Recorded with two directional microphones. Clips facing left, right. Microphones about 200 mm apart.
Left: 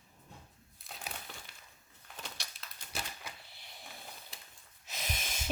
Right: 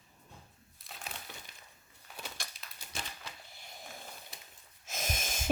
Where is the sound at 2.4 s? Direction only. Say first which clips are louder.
Right 2 dB; 50° right (ahead or behind).